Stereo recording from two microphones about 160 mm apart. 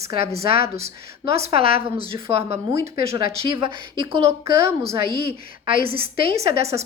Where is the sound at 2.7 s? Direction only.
20° right (ahead or behind).